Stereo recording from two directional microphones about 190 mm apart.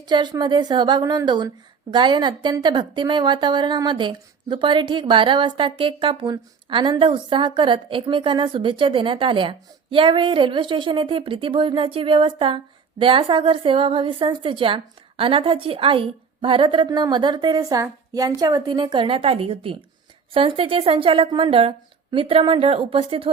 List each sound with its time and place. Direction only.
0.0 s a woman's voice: 25° right (ahead or behind)